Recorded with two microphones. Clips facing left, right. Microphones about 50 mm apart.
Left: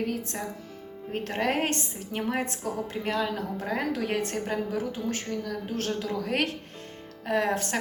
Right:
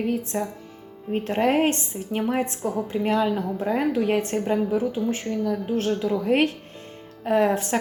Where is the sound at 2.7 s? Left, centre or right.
Centre.